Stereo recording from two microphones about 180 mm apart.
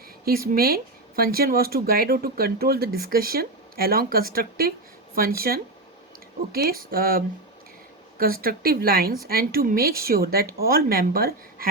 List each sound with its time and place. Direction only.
0.3 s speech: 55° right (ahead or behind)